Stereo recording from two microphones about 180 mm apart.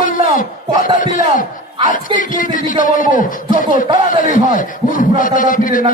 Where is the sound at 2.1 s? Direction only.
50° left (ahead or behind).